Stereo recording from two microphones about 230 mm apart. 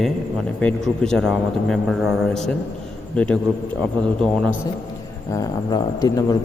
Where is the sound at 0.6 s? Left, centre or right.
Centre.